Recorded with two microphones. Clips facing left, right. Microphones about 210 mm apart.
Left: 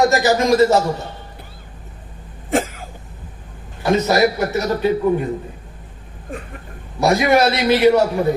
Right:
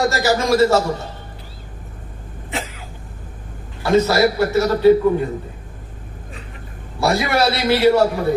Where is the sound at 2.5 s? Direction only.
50° left (ahead or behind).